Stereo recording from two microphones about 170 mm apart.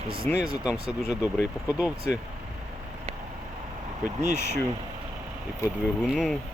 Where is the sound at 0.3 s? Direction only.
5° left (ahead or behind).